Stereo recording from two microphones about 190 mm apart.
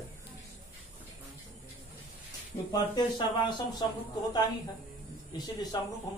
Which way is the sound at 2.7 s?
25° left (ahead or behind).